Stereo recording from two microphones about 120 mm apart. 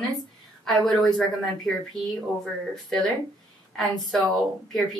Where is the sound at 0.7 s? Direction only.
Centre (ahead or behind).